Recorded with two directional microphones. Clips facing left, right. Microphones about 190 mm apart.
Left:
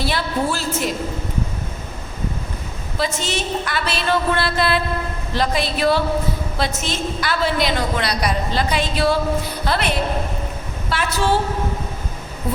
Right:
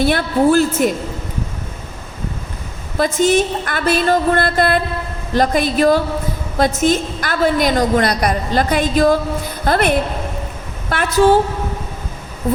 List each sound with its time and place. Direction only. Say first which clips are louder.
0.0 s a woman's voice: right 8 dB; 50° right (ahead or behind)
3.0 s a woman's voice: right 9 dB; 50° right (ahead or behind)